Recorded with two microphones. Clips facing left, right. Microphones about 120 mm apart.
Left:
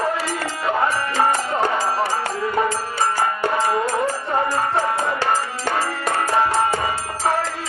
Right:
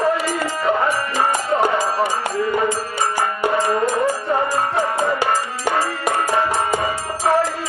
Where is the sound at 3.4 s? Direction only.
15° right (ahead or behind).